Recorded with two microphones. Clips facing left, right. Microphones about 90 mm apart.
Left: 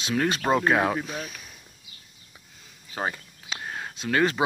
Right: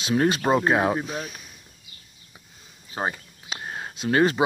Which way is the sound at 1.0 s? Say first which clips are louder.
Right 3 dB; 5° right (ahead or behind).